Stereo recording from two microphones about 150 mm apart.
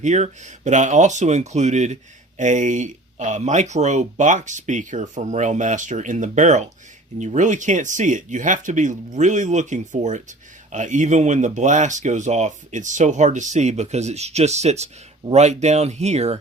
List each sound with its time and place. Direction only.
0.0 s speech: 50° right (ahead or behind)